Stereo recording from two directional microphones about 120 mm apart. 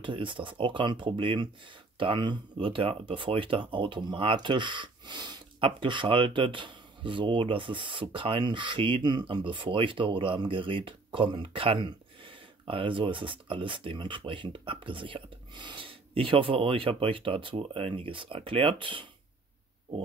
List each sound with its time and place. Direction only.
0.0 s speech: 45° right (ahead or behind)